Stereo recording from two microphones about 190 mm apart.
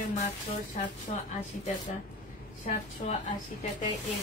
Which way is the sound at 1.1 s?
35° left (ahead or behind).